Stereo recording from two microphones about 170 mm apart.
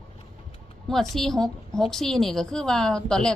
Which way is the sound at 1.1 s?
Centre (ahead or behind).